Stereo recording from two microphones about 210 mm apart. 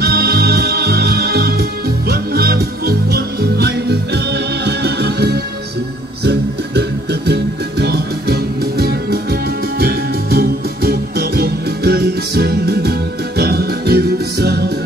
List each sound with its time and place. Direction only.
0.0 s music: 50° right (ahead or behind)